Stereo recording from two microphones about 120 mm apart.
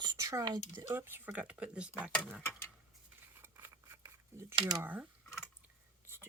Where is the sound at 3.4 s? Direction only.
20° right (ahead or behind).